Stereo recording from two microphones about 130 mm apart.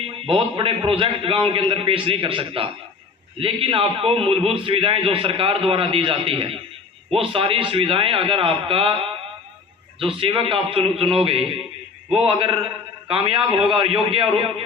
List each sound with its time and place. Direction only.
0.0 s a man's voice: 45° right (ahead or behind)